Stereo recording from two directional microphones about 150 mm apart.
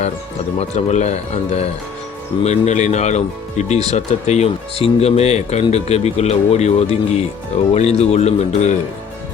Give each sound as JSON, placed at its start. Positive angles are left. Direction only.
{"t": 0.6, "sound": "speech", "side_deg": 45}